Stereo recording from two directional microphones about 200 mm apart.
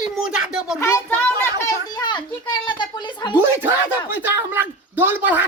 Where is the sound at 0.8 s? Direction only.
15° left (ahead or behind).